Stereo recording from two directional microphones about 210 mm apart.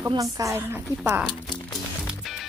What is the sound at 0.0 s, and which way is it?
Speech, 15° right (ahead or behind).